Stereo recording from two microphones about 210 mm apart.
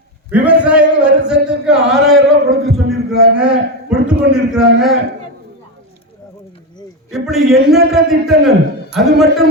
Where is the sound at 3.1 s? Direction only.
50° right (ahead or behind).